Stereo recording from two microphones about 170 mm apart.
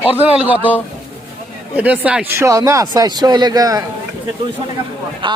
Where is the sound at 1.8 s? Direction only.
10° right (ahead or behind).